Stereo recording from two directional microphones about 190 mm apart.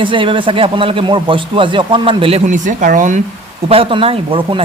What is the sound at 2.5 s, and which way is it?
Speech, 40° right (ahead or behind).